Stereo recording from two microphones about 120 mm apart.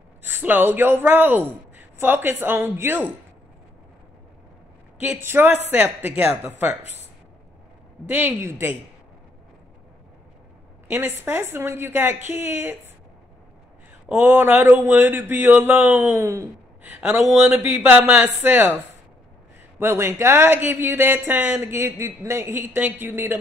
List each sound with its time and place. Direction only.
0.2 s speech: 15° right (ahead or behind)
5.0 s speech: 20° right (ahead or behind)
8.1 s speech: 15° right (ahead or behind)
10.9 s speech: 20° right (ahead or behind)
14.0 s speech: 20° right (ahead or behind)
17.5 s speech: 20° right (ahead or behind)
19.8 s speech: 20° right (ahead or behind)